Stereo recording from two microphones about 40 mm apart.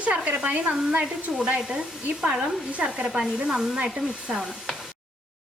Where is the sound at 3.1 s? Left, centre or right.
Centre.